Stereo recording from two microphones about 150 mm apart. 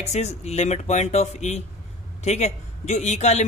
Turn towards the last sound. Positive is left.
turn(degrees=50)  # may be behind; listen again after turning